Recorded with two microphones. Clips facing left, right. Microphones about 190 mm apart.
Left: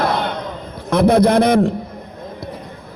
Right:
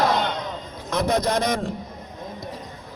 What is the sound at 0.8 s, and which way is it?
Speech, 55° left (ahead or behind).